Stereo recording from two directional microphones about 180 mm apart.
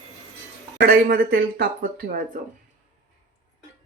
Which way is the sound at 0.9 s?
60° right (ahead or behind).